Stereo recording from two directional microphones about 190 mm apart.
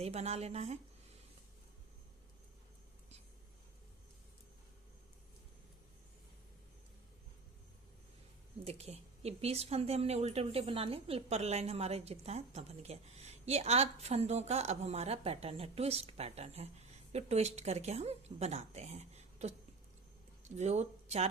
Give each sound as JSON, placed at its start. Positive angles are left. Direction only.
{"t": 0.0, "sound": "a woman's voice", "side_deg": -35}
{"t": 8.6, "sound": "a woman's voice", "side_deg": -35}
{"t": 20.6, "sound": "speech", "side_deg": -35}